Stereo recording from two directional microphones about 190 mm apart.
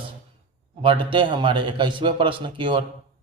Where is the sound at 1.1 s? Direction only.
25° right (ahead or behind).